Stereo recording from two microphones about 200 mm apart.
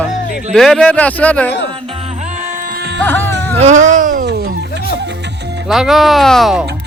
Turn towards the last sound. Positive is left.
turn(degrees=0)  # may be behind; listen again after turning